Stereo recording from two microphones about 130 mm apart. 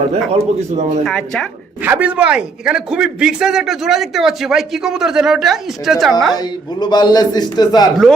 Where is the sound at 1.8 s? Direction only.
10° right (ahead or behind).